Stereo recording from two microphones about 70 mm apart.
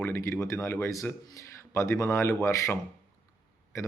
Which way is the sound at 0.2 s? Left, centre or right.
Left.